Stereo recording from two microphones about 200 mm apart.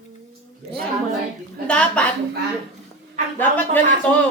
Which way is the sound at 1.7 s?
5° left (ahead or behind).